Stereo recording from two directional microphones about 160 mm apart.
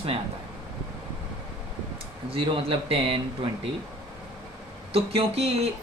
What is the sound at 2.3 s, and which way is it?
Speech, 35° right (ahead or behind).